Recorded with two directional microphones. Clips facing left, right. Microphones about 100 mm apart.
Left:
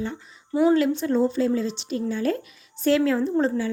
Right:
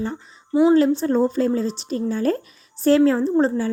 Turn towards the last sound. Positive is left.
turn(degrees=-35)  # may be behind; listen again after turning